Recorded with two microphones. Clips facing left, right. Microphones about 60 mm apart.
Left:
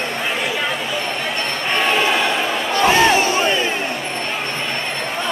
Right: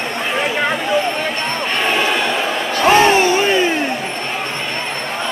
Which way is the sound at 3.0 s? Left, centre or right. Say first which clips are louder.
Right 2 dB; right.